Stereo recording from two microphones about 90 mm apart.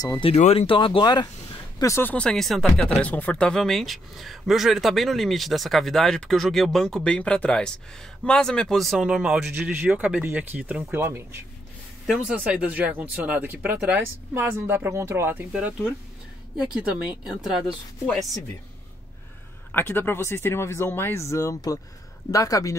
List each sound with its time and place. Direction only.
0.2 s speech: 80° left
1.0 s speech: 50° left (ahead or behind)
1.8 s speech: 35° left (ahead or behind)
2.0 s speech: 10° left (ahead or behind)
8.9 s speech: 5° right (ahead or behind)
9.5 s speech: 20° right (ahead or behind)
12.1 s speech: 10° right (ahead or behind); by 15.4 s 25° right (ahead or behind)
16.7 s speech: 10° right (ahead or behind)
19.7 s speech: 25° left (ahead or behind)